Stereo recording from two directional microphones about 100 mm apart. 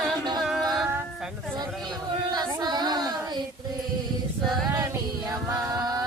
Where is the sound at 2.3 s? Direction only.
45° right (ahead or behind).